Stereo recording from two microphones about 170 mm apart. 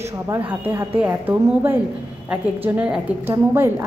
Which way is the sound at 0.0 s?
15° right (ahead or behind).